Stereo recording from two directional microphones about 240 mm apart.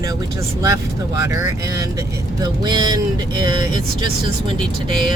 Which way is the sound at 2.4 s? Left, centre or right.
Centre.